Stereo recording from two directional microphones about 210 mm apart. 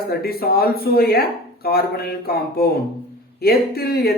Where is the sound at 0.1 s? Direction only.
45° left (ahead or behind).